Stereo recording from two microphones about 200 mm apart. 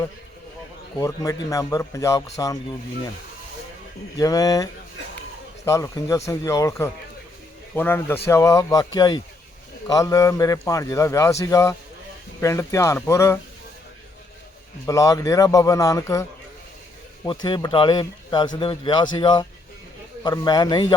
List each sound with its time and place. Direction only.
0.9 s a man's voice: 15° left (ahead or behind)
4.2 s a man's voice: 20° left (ahead or behind)
14.8 s a man's voice: 15° left (ahead or behind)
17.2 s speech: 20° left (ahead or behind)